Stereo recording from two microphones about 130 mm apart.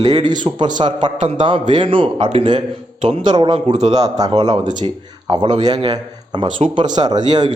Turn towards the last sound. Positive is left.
turn(degrees=-35)  # may be behind; listen again after turning